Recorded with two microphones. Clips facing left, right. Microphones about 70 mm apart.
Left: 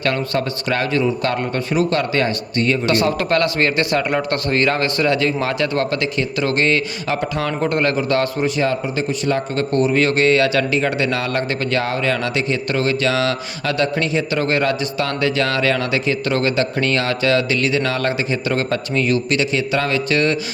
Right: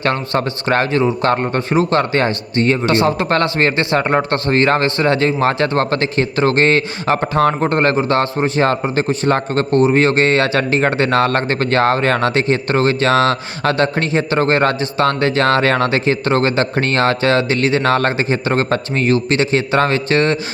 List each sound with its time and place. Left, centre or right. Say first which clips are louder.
0.0 s speech: right 2 dB; right
8.6 s speech: right 4 dB; right